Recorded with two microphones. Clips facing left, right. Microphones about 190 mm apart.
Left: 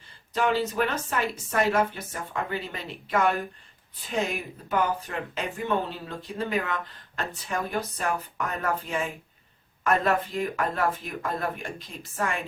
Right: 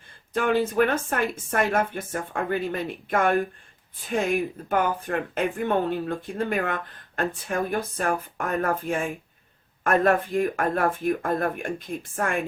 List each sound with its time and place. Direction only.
0.3 s speech: 50° right (ahead or behind)
4.7 s speech: 55° right (ahead or behind)